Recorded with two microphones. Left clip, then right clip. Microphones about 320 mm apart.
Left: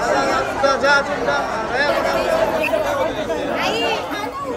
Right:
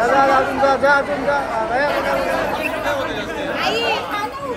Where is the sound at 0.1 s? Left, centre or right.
Centre.